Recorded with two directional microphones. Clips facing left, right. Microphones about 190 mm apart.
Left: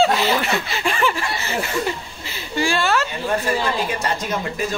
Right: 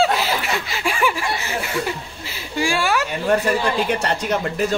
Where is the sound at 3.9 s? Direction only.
65° right (ahead or behind).